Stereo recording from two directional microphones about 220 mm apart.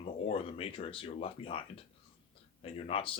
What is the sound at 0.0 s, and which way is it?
Speech, 25° left (ahead or behind).